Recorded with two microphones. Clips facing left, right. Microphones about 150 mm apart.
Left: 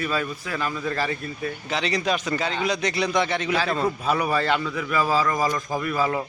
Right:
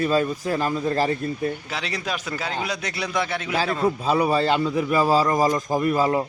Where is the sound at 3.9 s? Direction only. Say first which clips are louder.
Right 3 dB; 25° right (ahead or behind).